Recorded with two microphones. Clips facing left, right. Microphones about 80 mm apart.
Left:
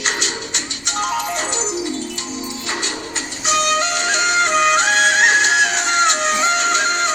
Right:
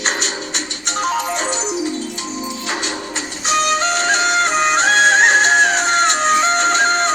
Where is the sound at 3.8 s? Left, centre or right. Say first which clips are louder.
Right 3 dB; right.